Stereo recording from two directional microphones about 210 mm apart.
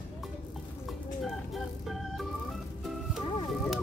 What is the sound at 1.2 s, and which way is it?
Organ, centre (ahead or behind).